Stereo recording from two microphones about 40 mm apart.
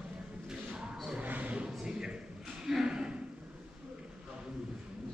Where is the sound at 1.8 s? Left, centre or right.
Centre.